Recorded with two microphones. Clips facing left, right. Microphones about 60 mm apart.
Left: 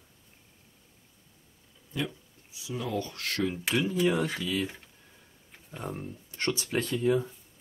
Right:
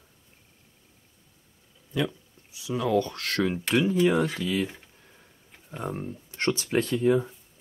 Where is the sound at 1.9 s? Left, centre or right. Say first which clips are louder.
Right 5 dB; right.